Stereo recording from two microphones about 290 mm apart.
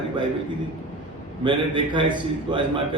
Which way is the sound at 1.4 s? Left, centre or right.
Centre.